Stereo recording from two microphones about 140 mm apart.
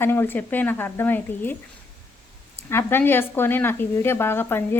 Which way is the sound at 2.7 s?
15° left (ahead or behind).